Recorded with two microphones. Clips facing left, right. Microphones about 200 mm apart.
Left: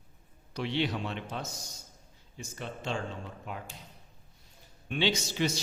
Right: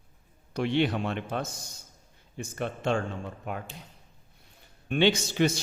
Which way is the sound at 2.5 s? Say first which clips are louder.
Right 7 dB; 55° right (ahead or behind).